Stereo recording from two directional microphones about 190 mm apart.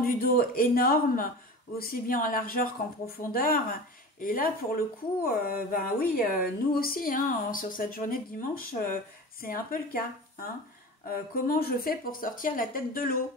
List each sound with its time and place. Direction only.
0.0 s speech: 50° left (ahead or behind)